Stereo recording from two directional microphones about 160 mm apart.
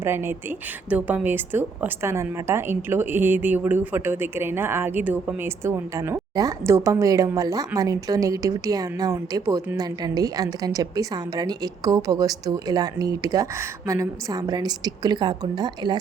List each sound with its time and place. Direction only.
0.0 s a woman's voice: 15° right (ahead or behind)